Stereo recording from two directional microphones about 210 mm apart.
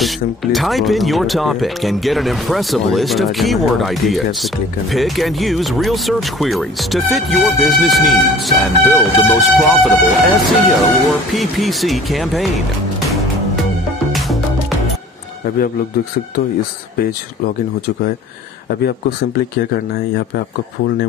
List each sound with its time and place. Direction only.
0.0 s speech: centre (ahead or behind)
18.9 s speech: 45° left (ahead or behind)